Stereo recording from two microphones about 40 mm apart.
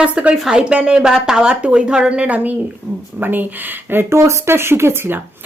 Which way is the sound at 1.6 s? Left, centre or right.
Right.